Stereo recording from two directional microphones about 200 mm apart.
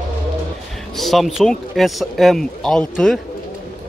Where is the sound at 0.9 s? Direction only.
Centre (ahead or behind).